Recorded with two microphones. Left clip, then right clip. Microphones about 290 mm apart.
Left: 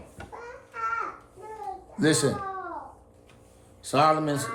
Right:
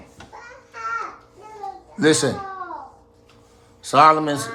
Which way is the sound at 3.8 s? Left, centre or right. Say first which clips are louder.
Right 8 dB; right.